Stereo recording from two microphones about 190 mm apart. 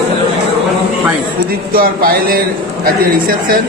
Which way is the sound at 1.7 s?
50° right (ahead or behind).